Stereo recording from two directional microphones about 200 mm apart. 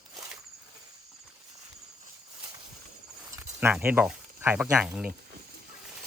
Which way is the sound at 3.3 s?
10° right (ahead or behind).